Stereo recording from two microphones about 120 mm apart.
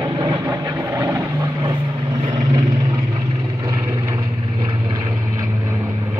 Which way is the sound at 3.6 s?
30° right (ahead or behind).